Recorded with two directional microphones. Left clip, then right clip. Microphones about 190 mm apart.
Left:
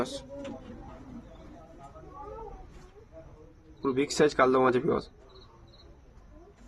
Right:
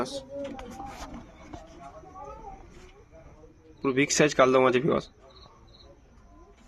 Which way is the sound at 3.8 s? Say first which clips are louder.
Right 2 dB; 20° right (ahead or behind).